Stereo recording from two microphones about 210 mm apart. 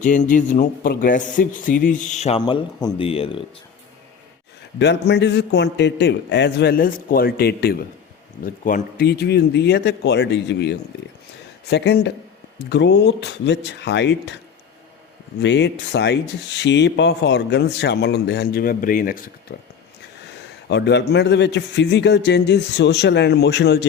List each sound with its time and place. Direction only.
0.0 s speech: 35° left (ahead or behind)
4.8 s speech: 55° left (ahead or behind)
15.4 s speech: 55° left (ahead or behind); by 19.5 s 40° left (ahead or behind)
20.7 s speech: 55° left (ahead or behind)